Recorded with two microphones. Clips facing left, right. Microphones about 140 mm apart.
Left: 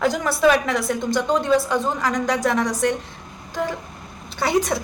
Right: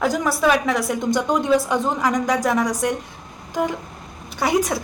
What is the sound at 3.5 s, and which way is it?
Music, 15° right (ahead or behind).